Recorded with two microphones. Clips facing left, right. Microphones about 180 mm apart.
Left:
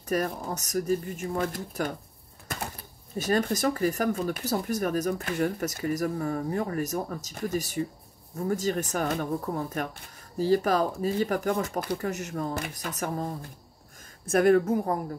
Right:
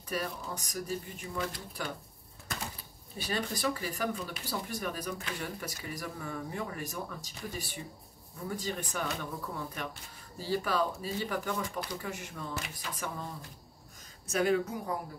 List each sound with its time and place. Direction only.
0.1 s speech: 50° left (ahead or behind)
3.2 s speech: 45° left (ahead or behind)